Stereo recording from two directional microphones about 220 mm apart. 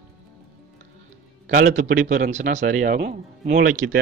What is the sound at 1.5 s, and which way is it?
Speech, 35° right (ahead or behind).